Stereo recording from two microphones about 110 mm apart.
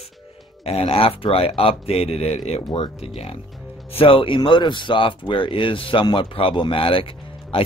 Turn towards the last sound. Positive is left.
turn(degrees=55)  # may be behind; listen again after turning